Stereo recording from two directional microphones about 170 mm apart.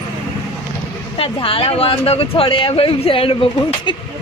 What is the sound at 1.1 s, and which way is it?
Speech, 30° left (ahead or behind).